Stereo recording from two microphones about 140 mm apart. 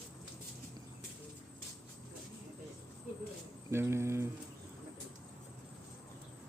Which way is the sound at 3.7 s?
20° right (ahead or behind).